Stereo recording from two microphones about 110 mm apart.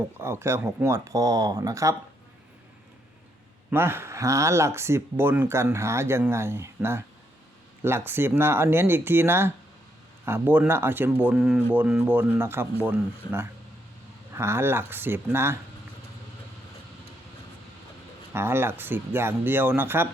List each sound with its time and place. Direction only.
0.2 s speech: 20° right (ahead or behind)
3.7 s speech: 20° right (ahead or behind)
11.3 s speech: 5° right (ahead or behind); by 15.5 s 20° right (ahead or behind)
18.3 s speech: 20° right (ahead or behind)